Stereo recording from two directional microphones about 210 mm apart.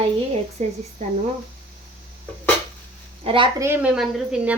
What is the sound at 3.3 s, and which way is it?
Speech, 25° right (ahead or behind).